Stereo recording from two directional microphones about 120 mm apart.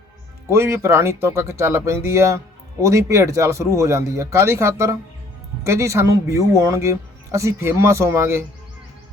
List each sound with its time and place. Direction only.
0.5 s speech: 20° right (ahead or behind)